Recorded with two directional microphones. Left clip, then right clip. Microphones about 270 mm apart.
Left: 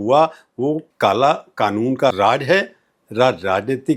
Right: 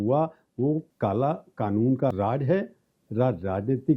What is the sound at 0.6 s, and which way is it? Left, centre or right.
Speech, left.